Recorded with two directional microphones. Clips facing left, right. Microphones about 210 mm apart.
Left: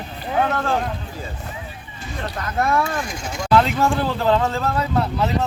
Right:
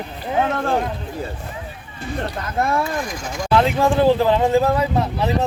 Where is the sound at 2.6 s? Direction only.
25° right (ahead or behind).